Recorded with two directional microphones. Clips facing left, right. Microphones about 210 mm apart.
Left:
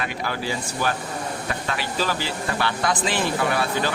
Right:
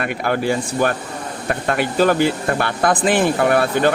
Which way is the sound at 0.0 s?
55° right (ahead or behind).